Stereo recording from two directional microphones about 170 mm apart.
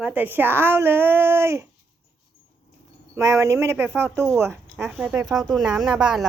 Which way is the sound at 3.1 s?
20° right (ahead or behind).